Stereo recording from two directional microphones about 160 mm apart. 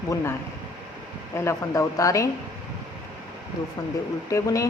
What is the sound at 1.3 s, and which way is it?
Speech, 20° left (ahead or behind).